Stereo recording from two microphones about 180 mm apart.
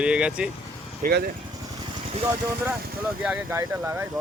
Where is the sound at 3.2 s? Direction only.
10° right (ahead or behind).